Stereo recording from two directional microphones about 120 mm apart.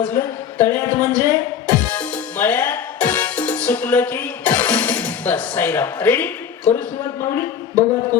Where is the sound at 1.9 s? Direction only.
15° left (ahead or behind).